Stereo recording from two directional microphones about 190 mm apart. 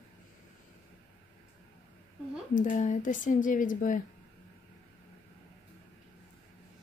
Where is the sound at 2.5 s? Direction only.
40° left (ahead or behind).